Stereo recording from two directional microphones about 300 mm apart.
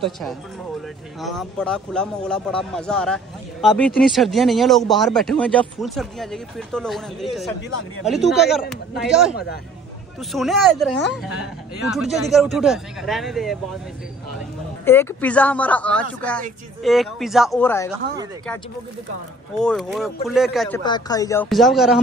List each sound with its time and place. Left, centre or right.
0.0 s speech: centre
10.3 s speech: centre
14.9 s speech: centre
19.5 s speech: centre
20.8 s speech: centre